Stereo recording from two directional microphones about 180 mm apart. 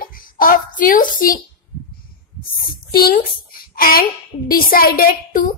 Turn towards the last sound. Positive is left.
turn(degrees=50)  # may be behind; listen again after turning